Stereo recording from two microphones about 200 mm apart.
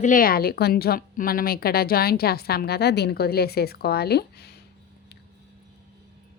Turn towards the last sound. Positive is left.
turn(degrees=55)  # may be behind; listen again after turning